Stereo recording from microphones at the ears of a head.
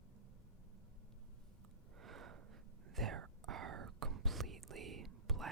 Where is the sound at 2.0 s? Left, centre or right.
Right.